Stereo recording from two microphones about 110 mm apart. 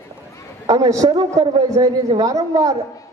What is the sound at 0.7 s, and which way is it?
A man's voice, 30° right (ahead or behind).